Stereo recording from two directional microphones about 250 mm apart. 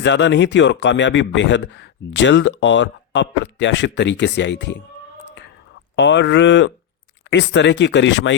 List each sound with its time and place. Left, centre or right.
0.0 s speech: left
6.0 s speech: left